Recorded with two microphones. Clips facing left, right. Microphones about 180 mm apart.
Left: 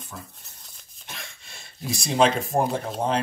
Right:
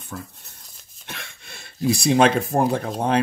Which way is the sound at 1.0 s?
65° right (ahead or behind).